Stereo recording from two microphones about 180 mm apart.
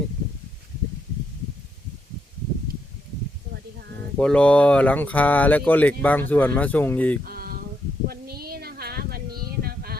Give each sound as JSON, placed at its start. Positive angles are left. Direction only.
{"t": 4.2, "sound": "speech", "side_deg": 5}
{"t": 7.3, "sound": "a sound", "side_deg": -55}
{"t": 9.6, "sound": "music", "side_deg": -60}